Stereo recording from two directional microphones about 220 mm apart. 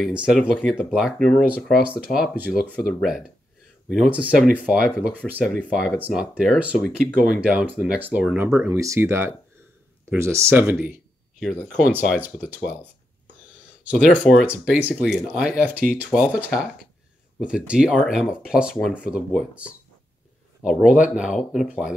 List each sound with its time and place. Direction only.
0.0 s speech: 5° right (ahead or behind)
3.9 s speech: 5° right (ahead or behind)
11.9 s speech: 5° right (ahead or behind)
13.8 s speech: 5° right (ahead or behind)